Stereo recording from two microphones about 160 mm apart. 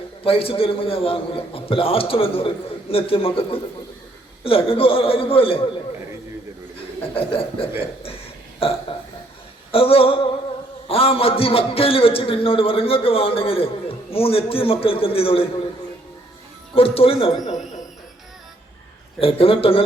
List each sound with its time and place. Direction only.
0.3 s a man's voice: 35° left (ahead or behind)
7.2 s a man's voice: 35° left (ahead or behind)
16.7 s a man's voice: 35° left (ahead or behind)
19.2 s a man's voice: 35° left (ahead or behind)